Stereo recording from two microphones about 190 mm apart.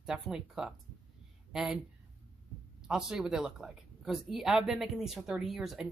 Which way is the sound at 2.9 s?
Centre (ahead or behind).